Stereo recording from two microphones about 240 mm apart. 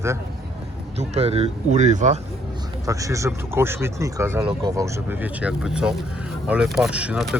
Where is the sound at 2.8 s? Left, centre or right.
Centre.